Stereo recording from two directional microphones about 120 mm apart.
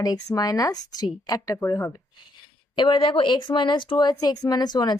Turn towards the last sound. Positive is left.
turn(degrees=35)  # may be behind; listen again after turning